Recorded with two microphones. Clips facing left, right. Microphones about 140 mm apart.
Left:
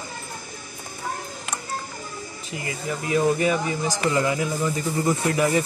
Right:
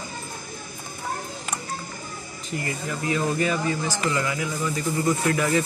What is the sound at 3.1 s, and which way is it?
Speech, 15° left (ahead or behind).